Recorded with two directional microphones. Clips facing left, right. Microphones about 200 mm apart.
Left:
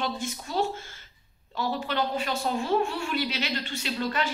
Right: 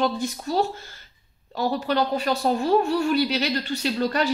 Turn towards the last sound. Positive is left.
turn(degrees=-40)  # may be behind; listen again after turning